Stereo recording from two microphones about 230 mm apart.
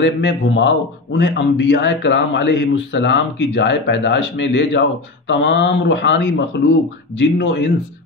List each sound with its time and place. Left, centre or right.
0.0 s a man's voice: left